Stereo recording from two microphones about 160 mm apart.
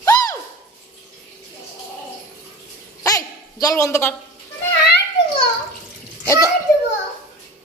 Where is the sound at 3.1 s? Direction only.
20° left (ahead or behind).